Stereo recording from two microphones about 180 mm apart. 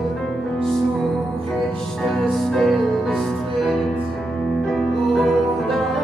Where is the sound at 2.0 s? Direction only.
Centre (ahead or behind).